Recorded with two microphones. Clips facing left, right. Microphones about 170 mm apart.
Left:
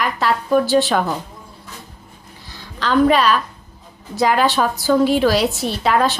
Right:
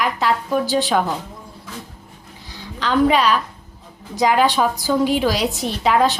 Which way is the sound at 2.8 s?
15° right (ahead or behind).